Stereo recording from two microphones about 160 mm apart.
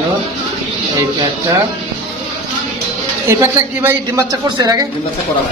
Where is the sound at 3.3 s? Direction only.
15° right (ahead or behind).